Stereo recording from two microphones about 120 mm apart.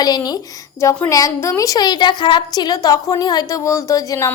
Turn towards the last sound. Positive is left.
turn(degrees=25)  # may be behind; listen again after turning